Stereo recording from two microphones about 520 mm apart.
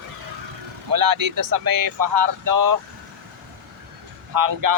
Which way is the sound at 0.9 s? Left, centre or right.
Right.